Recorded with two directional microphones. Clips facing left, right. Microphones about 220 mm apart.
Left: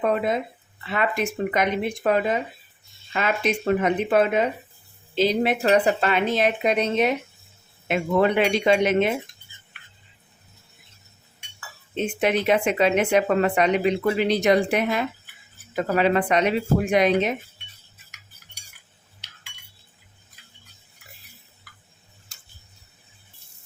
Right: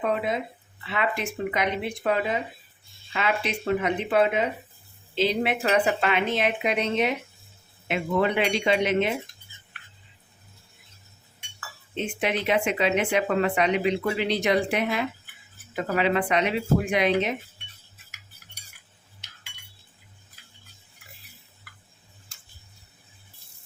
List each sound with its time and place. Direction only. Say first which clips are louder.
0.0 s a woman's voice: left 4 dB; 45° left (ahead or behind)
12.2 s speech: left 4 dB; 45° left (ahead or behind)
22.3 s tick-tock: left 1 dB; 40° left (ahead or behind)